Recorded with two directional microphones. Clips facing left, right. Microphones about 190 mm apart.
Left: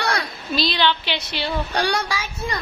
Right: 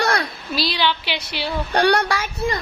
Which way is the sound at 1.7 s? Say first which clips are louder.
Right 10 dB; 60° right (ahead or behind).